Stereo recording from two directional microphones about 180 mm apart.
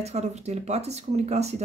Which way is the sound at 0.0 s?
40° right (ahead or behind).